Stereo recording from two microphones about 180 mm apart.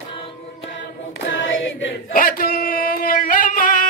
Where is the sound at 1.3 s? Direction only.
90° left.